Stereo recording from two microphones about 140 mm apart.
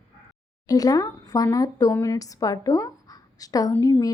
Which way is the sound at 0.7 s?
25° left (ahead or behind).